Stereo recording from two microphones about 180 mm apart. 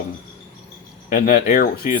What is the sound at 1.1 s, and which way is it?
Speech, 50° left (ahead or behind).